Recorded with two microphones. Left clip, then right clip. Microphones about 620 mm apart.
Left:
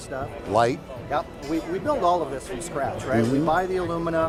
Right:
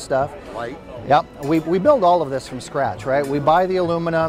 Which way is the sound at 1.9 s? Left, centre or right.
Right.